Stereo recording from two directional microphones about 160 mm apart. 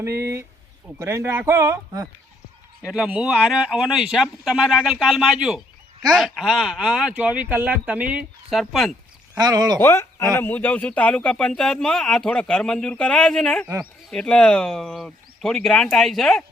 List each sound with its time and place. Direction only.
0.0 s speech: 15° right (ahead or behind)
2.8 s a man's voice: 5° right (ahead or behind)
9.4 s speech: 25° right (ahead or behind)
9.8 s a man's voice: 15° left (ahead or behind)